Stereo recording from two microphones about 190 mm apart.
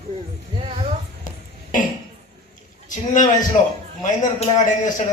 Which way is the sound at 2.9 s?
40° left (ahead or behind).